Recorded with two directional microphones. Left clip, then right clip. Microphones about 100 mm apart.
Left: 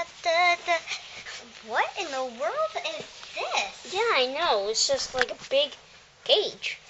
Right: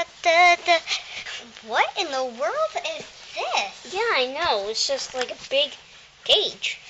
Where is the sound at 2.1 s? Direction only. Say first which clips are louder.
Right 4 dB; 40° right (ahead or behind).